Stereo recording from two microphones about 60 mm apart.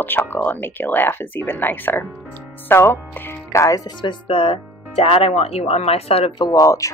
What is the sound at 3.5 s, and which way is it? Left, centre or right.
Speech, left.